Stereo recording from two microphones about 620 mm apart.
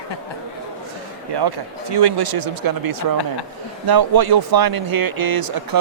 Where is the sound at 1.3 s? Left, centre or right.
Right.